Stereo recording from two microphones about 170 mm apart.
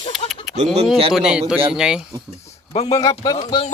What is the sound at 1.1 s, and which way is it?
Speech, 5° right (ahead or behind).